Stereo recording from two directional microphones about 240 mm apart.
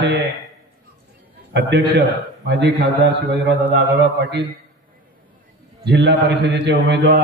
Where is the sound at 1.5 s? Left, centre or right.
Right.